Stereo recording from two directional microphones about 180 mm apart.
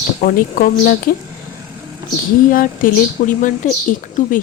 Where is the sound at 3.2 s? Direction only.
50° left (ahead or behind).